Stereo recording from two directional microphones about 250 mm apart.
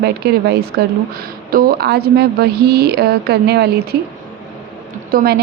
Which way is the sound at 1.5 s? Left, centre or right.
Right.